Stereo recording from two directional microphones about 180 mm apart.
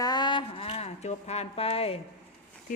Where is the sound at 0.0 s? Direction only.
25° left (ahead or behind).